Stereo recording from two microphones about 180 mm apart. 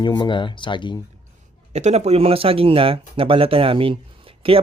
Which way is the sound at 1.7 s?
40° right (ahead or behind).